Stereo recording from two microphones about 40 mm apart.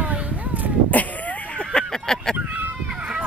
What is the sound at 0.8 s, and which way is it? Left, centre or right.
Cat, left.